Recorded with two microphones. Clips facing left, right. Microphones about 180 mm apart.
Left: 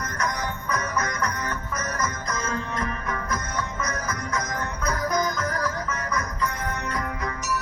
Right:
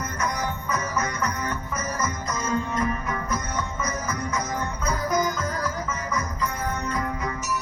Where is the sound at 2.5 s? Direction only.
5° right (ahead or behind).